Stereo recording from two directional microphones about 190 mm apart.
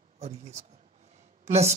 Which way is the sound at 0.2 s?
35° right (ahead or behind).